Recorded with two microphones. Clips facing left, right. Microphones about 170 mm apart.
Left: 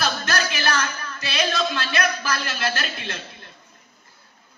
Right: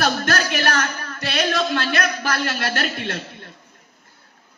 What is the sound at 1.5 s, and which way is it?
Speech, 65° right (ahead or behind).